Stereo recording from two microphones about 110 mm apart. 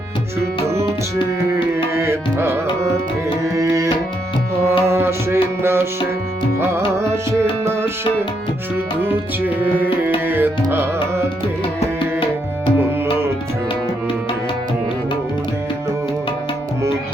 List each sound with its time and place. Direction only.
1.7 s music: 25° right (ahead or behind)
3.4 s tabla: 30° right (ahead or behind)
4.8 s music: 25° right (ahead or behind)
10.2 s music: 20° right (ahead or behind)